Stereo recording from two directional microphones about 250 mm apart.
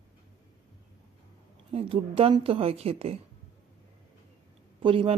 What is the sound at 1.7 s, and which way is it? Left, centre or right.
Speech, right.